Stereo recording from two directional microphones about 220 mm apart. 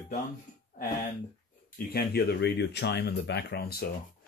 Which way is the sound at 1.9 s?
45° left (ahead or behind).